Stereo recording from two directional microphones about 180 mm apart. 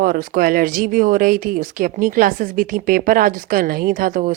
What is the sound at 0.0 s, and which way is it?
Speech, 50° right (ahead or behind).